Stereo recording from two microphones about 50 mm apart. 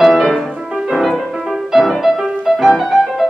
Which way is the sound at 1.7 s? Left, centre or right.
Centre.